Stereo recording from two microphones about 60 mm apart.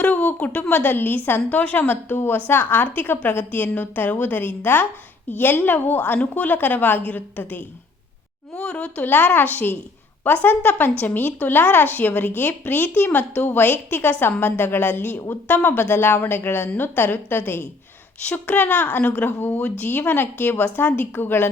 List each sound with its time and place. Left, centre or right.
0.0 s a woman's voice: left
8.5 s speech: centre
9.0 s a woman's voice: left
18.3 s a woman's voice: left